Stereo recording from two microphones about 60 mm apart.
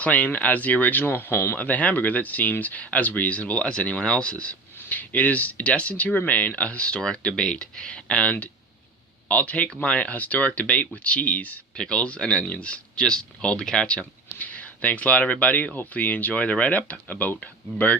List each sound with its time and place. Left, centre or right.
0.0 s speech: left
1.5 s speech: left